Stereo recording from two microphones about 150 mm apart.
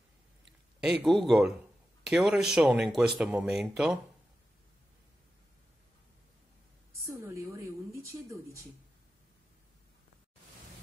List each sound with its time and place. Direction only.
1.0 s speech: centre (ahead or behind)
7.1 s a woman's voice: 20° right (ahead or behind)